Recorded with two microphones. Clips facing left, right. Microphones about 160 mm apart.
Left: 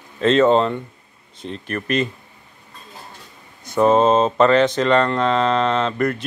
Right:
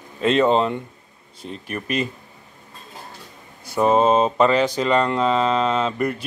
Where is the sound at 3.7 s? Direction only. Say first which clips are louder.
Left 2 dB; 10° right (ahead or behind).